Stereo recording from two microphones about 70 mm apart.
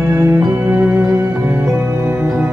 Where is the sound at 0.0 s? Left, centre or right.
Right.